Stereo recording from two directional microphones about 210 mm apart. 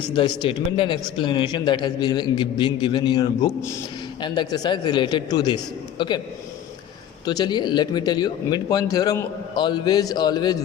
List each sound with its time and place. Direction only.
0.1 s speech: 25° left (ahead or behind)
7.3 s speech: 20° left (ahead or behind)